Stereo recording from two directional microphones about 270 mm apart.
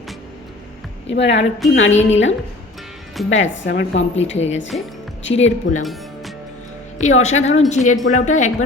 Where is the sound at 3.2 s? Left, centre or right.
Left.